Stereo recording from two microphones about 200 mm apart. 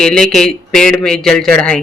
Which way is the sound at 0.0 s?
5° left (ahead or behind).